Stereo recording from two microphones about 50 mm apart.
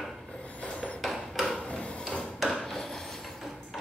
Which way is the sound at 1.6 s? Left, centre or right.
Left.